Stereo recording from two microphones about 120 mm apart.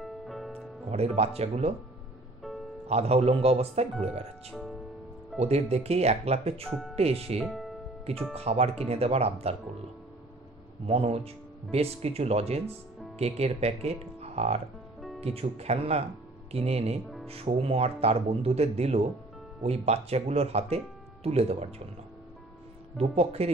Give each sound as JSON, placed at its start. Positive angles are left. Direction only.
{"t": 0.0, "sound": "music", "side_deg": 0}
{"t": 0.9, "sound": "speech", "side_deg": -60}
{"t": 2.9, "sound": "speech", "side_deg": -60}
{"t": 4.5, "sound": "speech", "side_deg": 5}
{"t": 5.4, "sound": "speech", "side_deg": -60}
{"t": 7.3, "sound": "speech", "side_deg": 0}
{"t": 8.0, "sound": "speech", "side_deg": -60}
{"t": 10.9, "sound": "speech", "side_deg": -55}
{"t": 22.9, "sound": "speech", "side_deg": -60}